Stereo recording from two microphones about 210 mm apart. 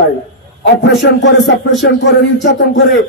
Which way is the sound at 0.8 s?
55° left (ahead or behind).